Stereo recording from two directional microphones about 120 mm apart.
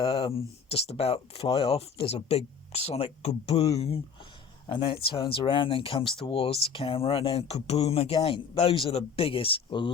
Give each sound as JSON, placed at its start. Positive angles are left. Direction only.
{"t": 0.3, "sound": "speech", "side_deg": 55}